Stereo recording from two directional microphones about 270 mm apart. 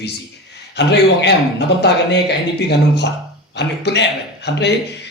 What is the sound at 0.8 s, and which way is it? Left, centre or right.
Speech, left.